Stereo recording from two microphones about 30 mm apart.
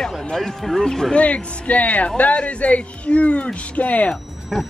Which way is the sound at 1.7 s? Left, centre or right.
Left.